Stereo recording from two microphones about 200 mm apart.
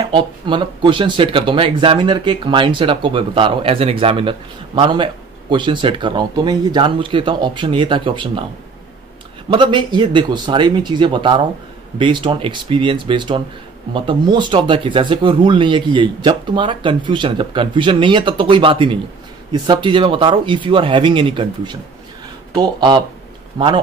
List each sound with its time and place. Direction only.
0.1 s speech: 25° right (ahead or behind)
9.5 s speech: 25° right (ahead or behind)